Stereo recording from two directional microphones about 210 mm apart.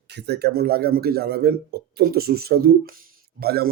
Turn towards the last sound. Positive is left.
turn(degrees=-45)  # may be behind; listen again after turning